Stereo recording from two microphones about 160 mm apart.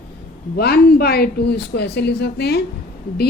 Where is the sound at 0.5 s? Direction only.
80° left.